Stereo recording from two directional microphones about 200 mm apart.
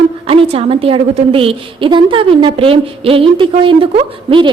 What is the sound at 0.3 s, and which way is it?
A woman's voice, 30° right (ahead or behind).